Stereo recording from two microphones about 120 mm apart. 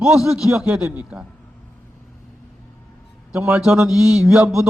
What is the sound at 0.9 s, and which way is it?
Speech, 10° right (ahead or behind).